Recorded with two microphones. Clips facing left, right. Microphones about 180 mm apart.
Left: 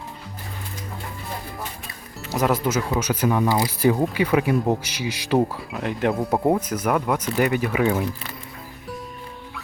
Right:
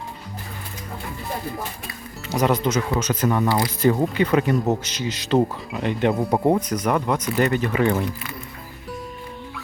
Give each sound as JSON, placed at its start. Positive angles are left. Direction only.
{"t": 2.2, "sound": "speech", "side_deg": 0}